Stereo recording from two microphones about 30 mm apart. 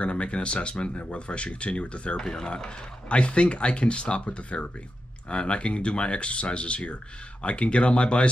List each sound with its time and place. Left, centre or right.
0.0 s speech: left
2.1 s speech: left
3.1 s speech: left